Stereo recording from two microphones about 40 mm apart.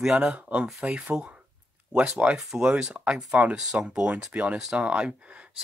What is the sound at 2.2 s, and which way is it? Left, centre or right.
Speech, right.